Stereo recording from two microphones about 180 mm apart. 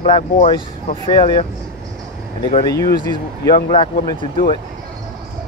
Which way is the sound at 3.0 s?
25° left (ahead or behind).